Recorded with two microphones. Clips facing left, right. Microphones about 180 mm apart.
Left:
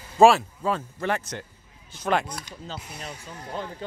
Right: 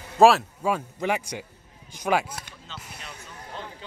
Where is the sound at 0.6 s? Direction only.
10° right (ahead or behind).